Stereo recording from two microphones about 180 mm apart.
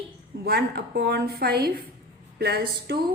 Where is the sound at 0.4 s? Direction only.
60° right (ahead or behind).